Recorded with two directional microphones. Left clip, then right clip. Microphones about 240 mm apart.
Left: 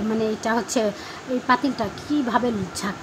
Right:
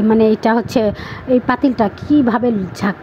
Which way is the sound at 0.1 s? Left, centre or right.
Right.